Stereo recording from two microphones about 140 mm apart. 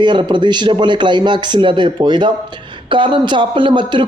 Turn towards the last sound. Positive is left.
turn(degrees=-35)  # may be behind; listen again after turning